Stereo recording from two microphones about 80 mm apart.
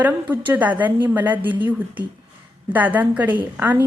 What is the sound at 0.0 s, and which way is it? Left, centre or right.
A woman's voice, right.